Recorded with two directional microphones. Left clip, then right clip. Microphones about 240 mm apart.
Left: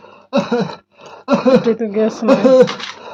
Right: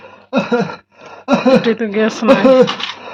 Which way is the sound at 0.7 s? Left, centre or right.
Centre.